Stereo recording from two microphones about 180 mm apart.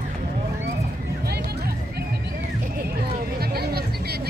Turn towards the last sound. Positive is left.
turn(degrees=-60)  # may be behind; listen again after turning